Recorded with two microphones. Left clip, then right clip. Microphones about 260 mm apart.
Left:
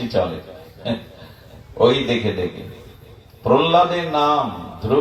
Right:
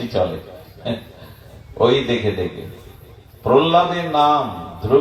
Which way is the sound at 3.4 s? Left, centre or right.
Left.